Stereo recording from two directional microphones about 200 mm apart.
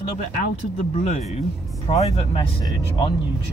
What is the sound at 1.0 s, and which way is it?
Speech, 35° left (ahead or behind).